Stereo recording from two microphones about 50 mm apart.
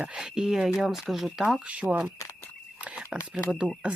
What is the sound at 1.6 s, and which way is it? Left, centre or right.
Speech, right.